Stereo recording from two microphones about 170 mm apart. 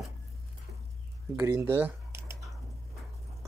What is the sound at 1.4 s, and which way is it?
Speech, 15° right (ahead or behind).